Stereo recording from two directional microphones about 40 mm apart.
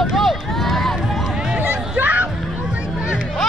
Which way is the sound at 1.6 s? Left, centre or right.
Right.